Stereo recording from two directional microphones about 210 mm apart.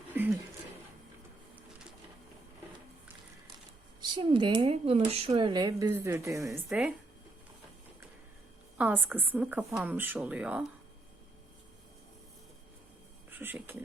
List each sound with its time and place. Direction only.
0.1 s a sound: 10° right (ahead or behind)
4.0 s speech: 20° right (ahead or behind)
6.5 s speech: 5° right (ahead or behind)
8.8 s a woman's voice: 10° right (ahead or behind)
13.3 s speech: 10° right (ahead or behind)